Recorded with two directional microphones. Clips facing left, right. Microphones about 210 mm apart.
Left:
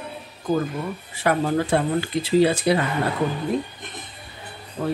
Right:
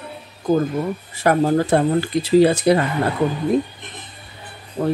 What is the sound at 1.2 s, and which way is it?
Speech, 40° right (ahead or behind).